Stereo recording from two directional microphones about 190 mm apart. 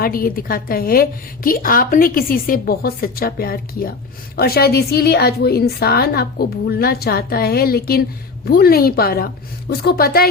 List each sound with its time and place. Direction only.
0.0 s a woman's voice: 50° left (ahead or behind)